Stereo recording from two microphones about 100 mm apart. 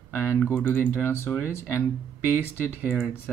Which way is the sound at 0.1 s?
15° left (ahead or behind).